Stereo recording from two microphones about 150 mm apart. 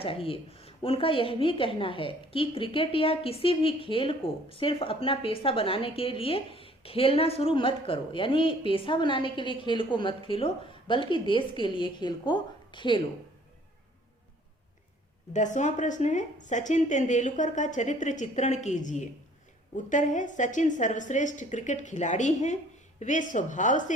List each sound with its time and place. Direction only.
0.0 s a woman's voice: 40° left (ahead or behind)
15.3 s a woman's voice: 55° left (ahead or behind)